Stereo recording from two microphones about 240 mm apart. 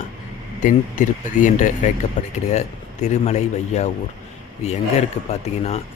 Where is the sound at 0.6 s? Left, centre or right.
Left.